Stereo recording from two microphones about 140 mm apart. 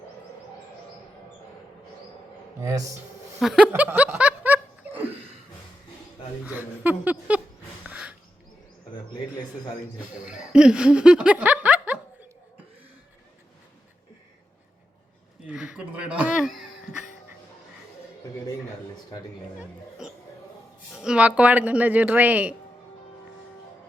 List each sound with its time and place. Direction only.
2.6 s speech: 20° right (ahead or behind)
3.4 s chuckle: 5° right (ahead or behind)
3.7 s snicker: 15° right (ahead or behind)
6.4 s speech: 10° right (ahead or behind)
7.9 s a sound: 10° right (ahead or behind)
10.0 s speech: 5° right (ahead or behind)
15.4 s a sound: 5° right (ahead or behind)
19.5 s chatter: 5° right (ahead or behind)
20.9 s speech: 5° right (ahead or behind)